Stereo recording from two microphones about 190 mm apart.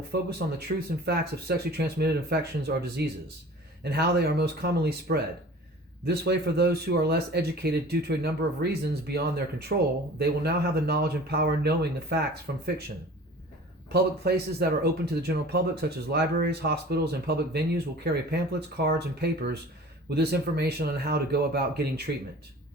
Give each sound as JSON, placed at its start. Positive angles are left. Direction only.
{"t": 0.1, "sound": "speech", "side_deg": -60}
{"t": 13.9, "sound": "speech", "side_deg": -55}